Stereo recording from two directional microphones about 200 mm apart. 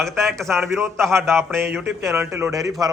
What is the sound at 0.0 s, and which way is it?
A man's voice, centre (ahead or behind).